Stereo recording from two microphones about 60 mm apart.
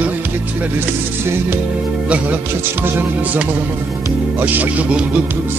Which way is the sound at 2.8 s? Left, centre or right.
Right.